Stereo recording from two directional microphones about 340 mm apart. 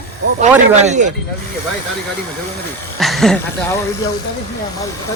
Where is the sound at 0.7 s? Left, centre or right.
Centre.